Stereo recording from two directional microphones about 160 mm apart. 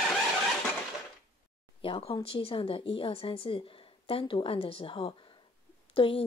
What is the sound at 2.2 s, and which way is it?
A woman's voice, 35° left (ahead or behind).